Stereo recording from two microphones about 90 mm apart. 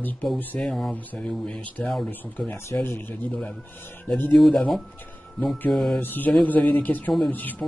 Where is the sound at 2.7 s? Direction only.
30° left (ahead or behind).